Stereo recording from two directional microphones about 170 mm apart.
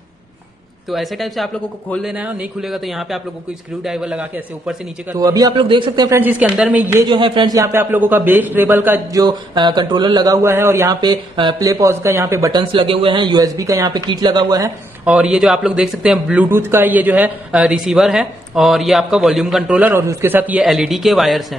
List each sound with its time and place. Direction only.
0.8 s a man's voice: centre (ahead or behind)
5.1 s a man's voice: 20° right (ahead or behind)
7.1 s a man's voice: 30° right (ahead or behind); by 9.2 s 10° right (ahead or behind)
9.2 s a man's voice: 25° right (ahead or behind)
12.7 s a man's voice: 30° right (ahead or behind)
15.0 s a man's voice: 5° right (ahead or behind)